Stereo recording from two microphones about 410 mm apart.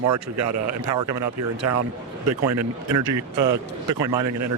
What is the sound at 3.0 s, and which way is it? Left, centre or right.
Speech, right.